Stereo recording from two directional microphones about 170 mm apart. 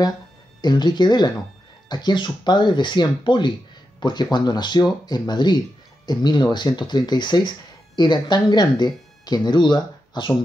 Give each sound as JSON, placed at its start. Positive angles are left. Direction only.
{"t": 0.6, "sound": "speech", "side_deg": 25}